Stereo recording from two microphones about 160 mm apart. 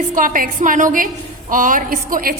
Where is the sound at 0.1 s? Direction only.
60° right (ahead or behind).